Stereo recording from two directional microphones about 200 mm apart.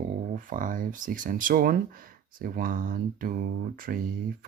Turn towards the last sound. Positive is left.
turn(degrees=-45)  # may be behind; listen again after turning